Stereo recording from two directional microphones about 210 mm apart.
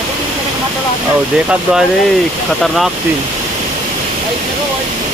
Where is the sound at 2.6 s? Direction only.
Centre (ahead or behind).